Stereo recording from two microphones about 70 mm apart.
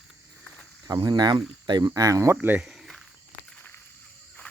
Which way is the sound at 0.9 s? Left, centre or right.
Right.